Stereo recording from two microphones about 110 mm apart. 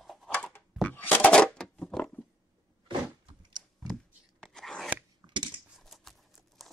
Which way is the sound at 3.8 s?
5° left (ahead or behind).